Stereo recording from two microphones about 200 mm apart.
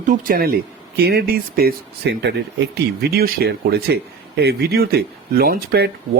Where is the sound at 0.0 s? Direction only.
40° right (ahead or behind).